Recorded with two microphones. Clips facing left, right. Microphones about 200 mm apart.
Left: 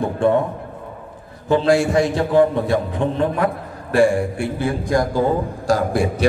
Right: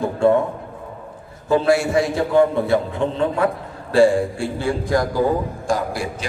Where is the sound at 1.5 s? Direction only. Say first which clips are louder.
Left 1 dB; 20° left (ahead or behind).